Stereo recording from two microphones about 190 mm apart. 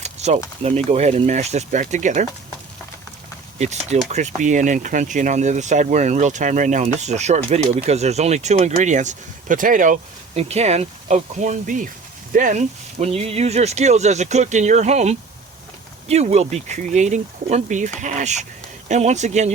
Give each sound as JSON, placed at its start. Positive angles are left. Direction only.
{"t": 0.0, "sound": "a sound", "side_deg": -35}
{"t": 0.9, "sound": "speech", "side_deg": -35}
{"t": 3.6, "sound": "speech", "side_deg": -35}